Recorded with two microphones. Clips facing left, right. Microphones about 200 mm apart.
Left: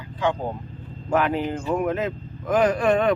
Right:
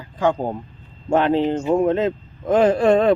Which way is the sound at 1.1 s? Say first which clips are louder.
Right 5 dB; 30° right (ahead or behind).